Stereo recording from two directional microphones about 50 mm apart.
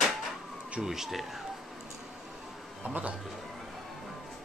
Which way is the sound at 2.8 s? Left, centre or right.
Right.